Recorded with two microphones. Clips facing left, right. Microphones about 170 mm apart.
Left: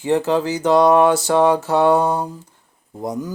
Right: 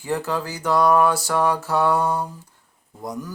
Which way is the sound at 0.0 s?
20° left (ahead or behind).